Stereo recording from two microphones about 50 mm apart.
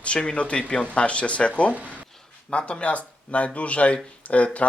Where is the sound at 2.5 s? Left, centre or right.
Left.